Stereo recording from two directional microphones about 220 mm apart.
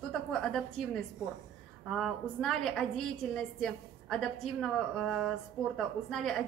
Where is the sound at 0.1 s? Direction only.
Centre (ahead or behind).